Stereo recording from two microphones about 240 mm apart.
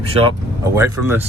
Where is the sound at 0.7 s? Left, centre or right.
Centre.